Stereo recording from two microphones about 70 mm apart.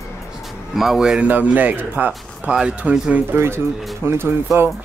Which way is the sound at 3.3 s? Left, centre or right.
Right.